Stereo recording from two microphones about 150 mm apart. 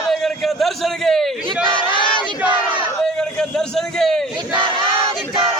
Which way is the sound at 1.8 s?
30° left (ahead or behind).